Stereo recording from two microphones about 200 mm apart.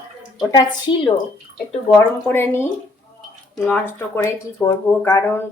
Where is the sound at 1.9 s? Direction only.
10° left (ahead or behind).